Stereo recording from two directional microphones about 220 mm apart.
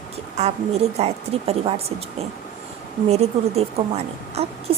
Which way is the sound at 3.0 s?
30° right (ahead or behind).